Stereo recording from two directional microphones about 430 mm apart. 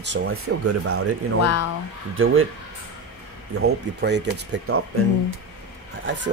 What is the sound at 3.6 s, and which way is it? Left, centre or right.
Speech, right.